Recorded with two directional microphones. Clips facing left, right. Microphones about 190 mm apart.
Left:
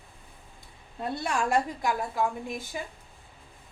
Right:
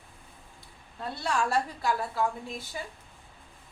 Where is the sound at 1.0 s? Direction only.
20° left (ahead or behind).